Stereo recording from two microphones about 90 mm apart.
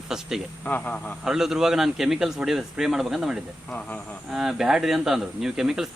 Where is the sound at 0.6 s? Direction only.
15° left (ahead or behind).